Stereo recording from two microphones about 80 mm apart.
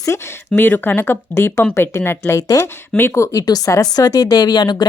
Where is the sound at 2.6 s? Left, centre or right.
Left.